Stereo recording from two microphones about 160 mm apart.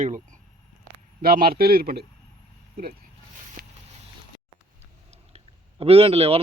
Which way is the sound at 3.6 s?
80° right.